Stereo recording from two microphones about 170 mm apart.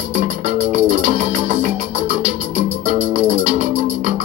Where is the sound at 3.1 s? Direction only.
40° right (ahead or behind).